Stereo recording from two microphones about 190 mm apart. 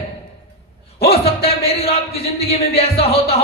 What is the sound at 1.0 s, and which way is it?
Speech, 30° left (ahead or behind).